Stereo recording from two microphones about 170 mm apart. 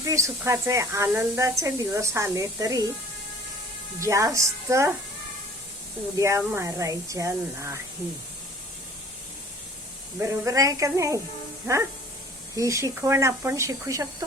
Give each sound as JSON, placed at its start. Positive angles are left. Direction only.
{"t": 0.0, "sound": "speech", "side_deg": -20}
{"t": 4.0, "sound": "speech", "side_deg": -20}
{"t": 6.1, "sound": "speech", "side_deg": -15}
{"t": 10.2, "sound": "a woman's voice", "side_deg": -15}